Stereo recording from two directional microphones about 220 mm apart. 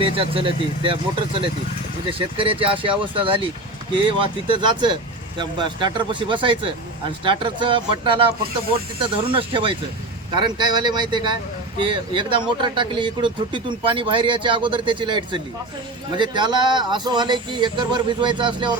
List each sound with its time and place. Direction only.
0.0 s speech: 25° right (ahead or behind)